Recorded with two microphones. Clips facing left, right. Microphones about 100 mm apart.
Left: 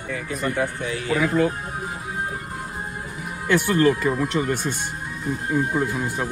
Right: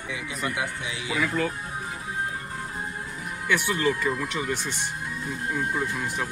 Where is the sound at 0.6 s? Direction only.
15° right (ahead or behind).